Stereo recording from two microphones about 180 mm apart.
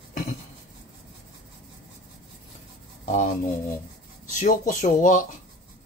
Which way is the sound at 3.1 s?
40° left (ahead or behind).